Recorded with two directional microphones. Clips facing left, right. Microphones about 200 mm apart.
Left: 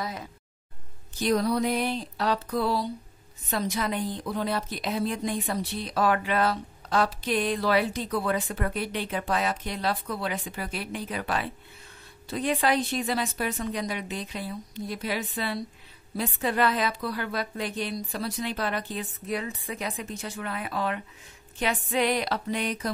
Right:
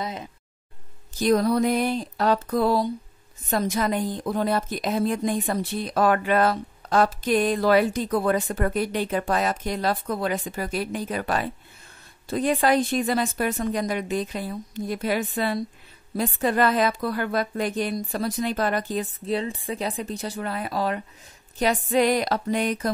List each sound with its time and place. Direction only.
0.0 s speech: 20° right (ahead or behind)
1.2 s a woman's voice: 50° right (ahead or behind)
19.2 s a woman's voice: 30° right (ahead or behind); by 22.8 s 45° right (ahead or behind)